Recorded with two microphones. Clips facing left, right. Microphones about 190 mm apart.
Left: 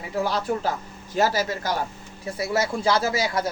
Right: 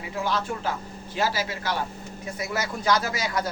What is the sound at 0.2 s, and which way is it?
A man's voice, 35° left (ahead or behind).